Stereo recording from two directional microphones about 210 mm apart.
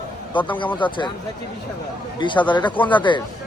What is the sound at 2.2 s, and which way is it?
A man's voice, 20° left (ahead or behind).